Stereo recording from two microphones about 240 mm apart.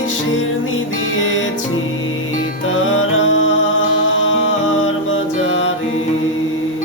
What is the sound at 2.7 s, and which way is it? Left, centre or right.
Music, left.